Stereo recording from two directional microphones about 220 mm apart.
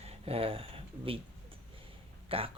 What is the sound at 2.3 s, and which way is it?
Speech, 25° right (ahead or behind).